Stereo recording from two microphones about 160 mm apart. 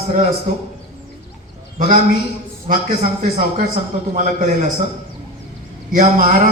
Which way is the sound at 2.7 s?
50° right (ahead or behind).